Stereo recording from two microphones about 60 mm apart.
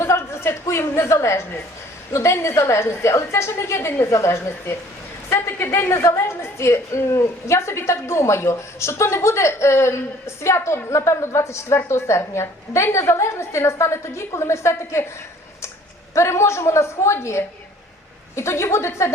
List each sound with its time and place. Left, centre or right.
0.0 s a sound: left
1.1 s a woman's voice: left
16.1 s a woman's voice: left